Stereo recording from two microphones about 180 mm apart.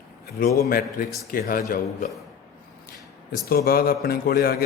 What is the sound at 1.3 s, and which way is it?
Speech, 50° left (ahead or behind).